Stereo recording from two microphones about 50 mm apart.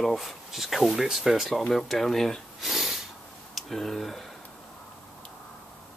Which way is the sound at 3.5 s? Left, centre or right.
Centre.